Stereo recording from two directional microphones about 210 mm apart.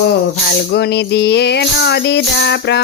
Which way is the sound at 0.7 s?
55° left (ahead or behind).